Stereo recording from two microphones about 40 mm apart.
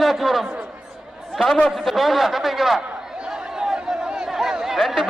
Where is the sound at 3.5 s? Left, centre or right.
Centre.